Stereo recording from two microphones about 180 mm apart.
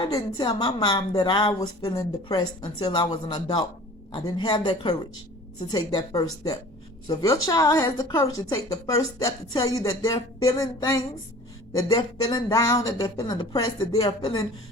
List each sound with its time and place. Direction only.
0.0 s a woman's voice: 25° left (ahead or behind)